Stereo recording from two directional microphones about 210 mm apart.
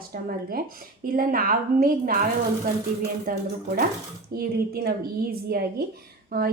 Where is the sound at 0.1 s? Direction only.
45° right (ahead or behind).